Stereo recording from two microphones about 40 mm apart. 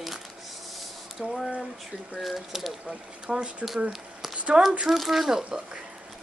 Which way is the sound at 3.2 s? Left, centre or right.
Right.